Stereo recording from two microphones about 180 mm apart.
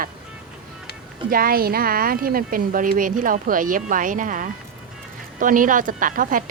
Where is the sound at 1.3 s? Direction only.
55° right (ahead or behind).